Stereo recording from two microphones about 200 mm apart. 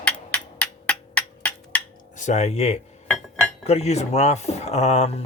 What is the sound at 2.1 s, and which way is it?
Speech, 35° left (ahead or behind).